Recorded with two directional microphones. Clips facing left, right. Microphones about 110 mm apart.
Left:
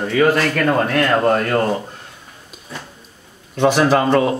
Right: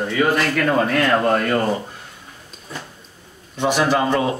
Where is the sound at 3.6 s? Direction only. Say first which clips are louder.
Left 4 dB; 55° left (ahead or behind).